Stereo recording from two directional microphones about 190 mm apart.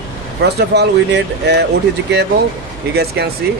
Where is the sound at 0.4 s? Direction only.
60° right (ahead or behind).